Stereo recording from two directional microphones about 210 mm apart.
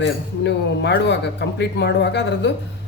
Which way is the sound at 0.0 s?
55° left (ahead or behind).